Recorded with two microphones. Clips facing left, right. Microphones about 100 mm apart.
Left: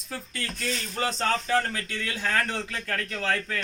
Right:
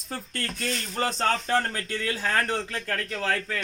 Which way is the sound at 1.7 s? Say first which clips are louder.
Right 3 dB; 35° right (ahead or behind).